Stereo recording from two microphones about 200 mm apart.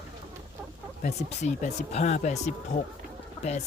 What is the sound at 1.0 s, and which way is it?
Speech, 35° left (ahead or behind).